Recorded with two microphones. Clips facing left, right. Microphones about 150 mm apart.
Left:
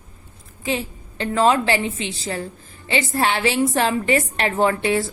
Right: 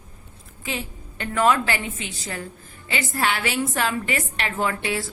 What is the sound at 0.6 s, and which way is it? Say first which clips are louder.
A woman's voice: left 6 dB; 30° left (ahead or behind).